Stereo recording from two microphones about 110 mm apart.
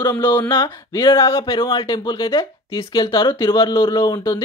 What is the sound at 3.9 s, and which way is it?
Speech, 35° left (ahead or behind).